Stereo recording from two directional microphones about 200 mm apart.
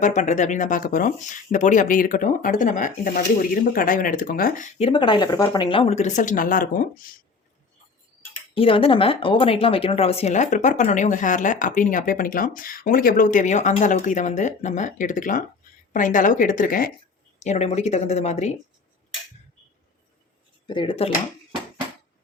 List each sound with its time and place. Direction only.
0.0 s speech: 35° left (ahead or behind)
4.9 s speech: 25° left (ahead or behind); by 7.1 s 45° left (ahead or behind)
8.5 s speech: 25° left (ahead or behind); by 16.9 s 45° left (ahead or behind)
17.4 s speech: 35° left (ahead or behind)
20.7 s speech: 25° left (ahead or behind)